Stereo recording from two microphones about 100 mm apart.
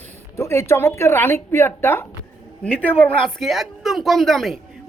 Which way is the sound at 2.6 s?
10° left (ahead or behind).